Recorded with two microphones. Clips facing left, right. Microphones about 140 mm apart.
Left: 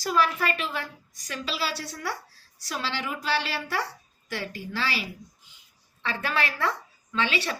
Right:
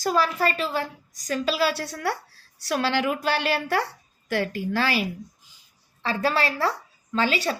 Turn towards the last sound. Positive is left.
turn(degrees=-40)  # may be behind; listen again after turning